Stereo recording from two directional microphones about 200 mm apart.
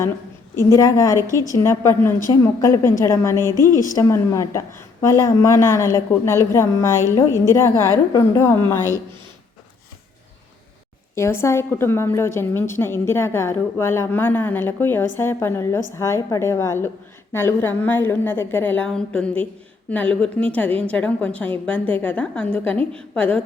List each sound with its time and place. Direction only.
0.7 s a woman's voice: 15° left (ahead or behind)
1.1 s a woman's voice: 15° right (ahead or behind)
1.5 s a woman's voice: 15° left (ahead or behind)
11.1 s a woman's voice: 15° left (ahead or behind)